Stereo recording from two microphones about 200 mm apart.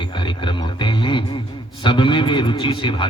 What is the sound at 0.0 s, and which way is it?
A man's voice, 25° left (ahead or behind).